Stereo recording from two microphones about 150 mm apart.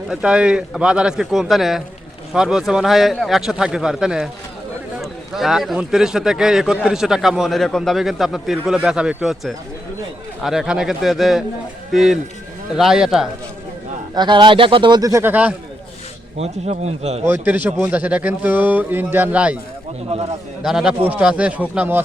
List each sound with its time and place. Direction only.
0.1 s a man's voice: 5° right (ahead or behind)
14.2 s speech: 30° right (ahead or behind); by 15.5 s 10° right (ahead or behind)
16.4 s speech: 45° right (ahead or behind)
17.2 s speech: 10° right (ahead or behind)
20.6 s a man's voice: 5° right (ahead or behind)